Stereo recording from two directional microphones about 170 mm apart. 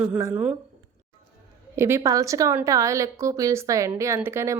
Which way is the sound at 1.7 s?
15° right (ahead or behind).